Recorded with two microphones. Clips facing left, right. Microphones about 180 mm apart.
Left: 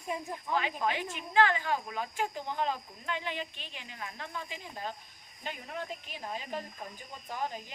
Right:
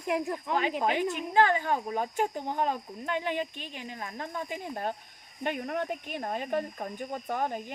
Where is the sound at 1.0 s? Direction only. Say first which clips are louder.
Right 2 dB; 50° right (ahead or behind).